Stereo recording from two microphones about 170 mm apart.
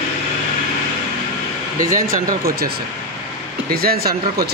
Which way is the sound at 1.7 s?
50° right (ahead or behind).